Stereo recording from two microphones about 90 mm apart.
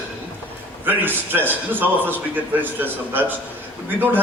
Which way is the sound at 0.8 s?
20° right (ahead or behind).